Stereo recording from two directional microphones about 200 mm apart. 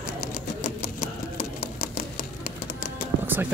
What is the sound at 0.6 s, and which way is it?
Sewing machine, 45° left (ahead or behind).